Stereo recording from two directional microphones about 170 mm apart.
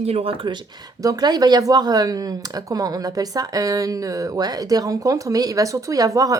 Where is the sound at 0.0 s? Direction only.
35° right (ahead or behind).